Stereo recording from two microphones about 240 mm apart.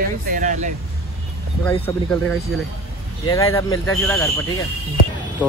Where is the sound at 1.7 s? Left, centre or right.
Left.